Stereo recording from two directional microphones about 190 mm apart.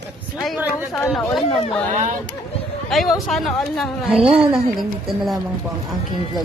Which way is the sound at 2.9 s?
Centre (ahead or behind).